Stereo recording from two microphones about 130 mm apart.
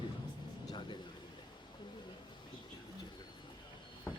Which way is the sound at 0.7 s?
35° left (ahead or behind).